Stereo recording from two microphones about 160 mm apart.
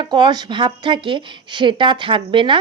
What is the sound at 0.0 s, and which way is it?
A woman's voice, 30° right (ahead or behind).